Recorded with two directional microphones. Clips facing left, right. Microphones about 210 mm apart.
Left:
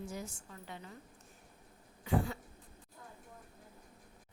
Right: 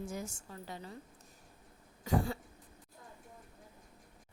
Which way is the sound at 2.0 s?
35° right (ahead or behind).